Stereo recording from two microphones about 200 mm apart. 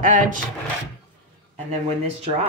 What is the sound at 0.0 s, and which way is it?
Speech, 40° right (ahead or behind).